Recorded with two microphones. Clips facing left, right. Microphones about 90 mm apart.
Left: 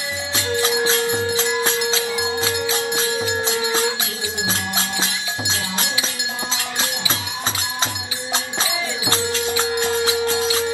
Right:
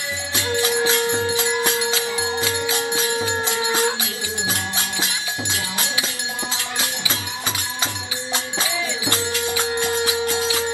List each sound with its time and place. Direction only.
0.6 s music: 25° left (ahead or behind)
5.5 s music: 25° left (ahead or behind)
8.5 s music: 25° left (ahead or behind)